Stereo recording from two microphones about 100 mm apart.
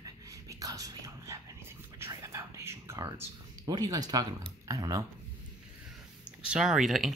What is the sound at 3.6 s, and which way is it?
Speech, 40° right (ahead or behind).